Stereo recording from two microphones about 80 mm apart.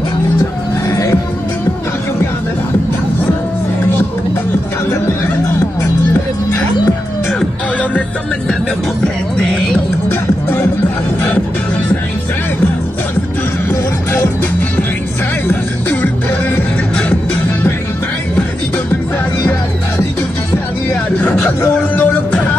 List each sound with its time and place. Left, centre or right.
0.8 s music: left
9.0 s music: centre
13.7 s music: left
21.2 s music: left